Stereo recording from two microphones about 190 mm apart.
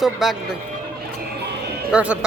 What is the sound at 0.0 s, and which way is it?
Speech, centre (ahead or behind).